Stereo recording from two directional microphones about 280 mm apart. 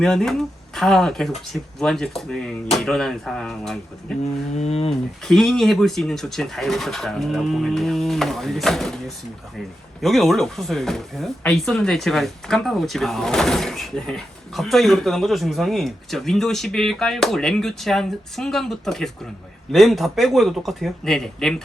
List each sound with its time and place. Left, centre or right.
0.0 s speech: centre
4.5 s speech: left
5.2 s speech: centre